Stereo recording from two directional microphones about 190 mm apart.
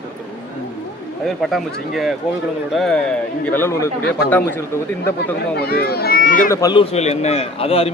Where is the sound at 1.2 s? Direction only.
Centre (ahead or behind).